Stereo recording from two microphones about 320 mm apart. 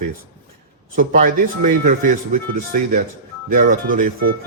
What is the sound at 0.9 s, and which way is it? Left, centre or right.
A man's voice, right.